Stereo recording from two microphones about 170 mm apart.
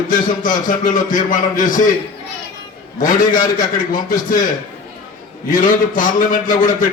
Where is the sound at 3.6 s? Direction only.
50° left (ahead or behind).